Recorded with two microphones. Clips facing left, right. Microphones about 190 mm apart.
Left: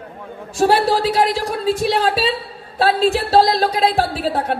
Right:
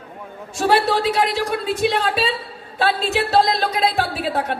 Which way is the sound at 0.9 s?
35° left (ahead or behind).